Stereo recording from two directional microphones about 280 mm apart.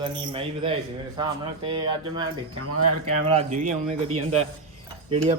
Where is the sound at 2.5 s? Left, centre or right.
Right.